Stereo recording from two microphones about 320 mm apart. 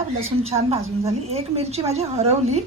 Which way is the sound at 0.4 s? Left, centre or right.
Centre.